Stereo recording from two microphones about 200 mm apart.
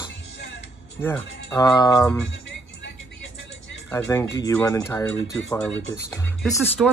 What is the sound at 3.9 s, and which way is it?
Speech, 15° left (ahead or behind).